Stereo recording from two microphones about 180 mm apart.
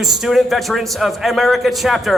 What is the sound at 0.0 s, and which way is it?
A man's voice, centre (ahead or behind).